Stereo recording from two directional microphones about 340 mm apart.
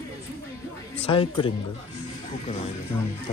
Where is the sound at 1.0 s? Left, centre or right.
Centre.